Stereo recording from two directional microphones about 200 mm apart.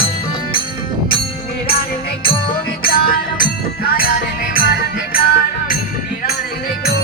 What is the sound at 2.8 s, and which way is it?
Music, 50° left (ahead or behind).